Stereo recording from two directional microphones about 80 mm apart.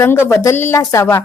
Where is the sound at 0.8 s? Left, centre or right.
Left.